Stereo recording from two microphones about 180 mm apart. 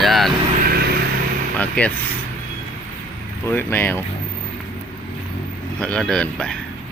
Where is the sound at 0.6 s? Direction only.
55° right (ahead or behind).